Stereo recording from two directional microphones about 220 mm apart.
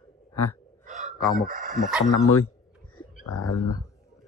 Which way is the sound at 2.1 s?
80° left.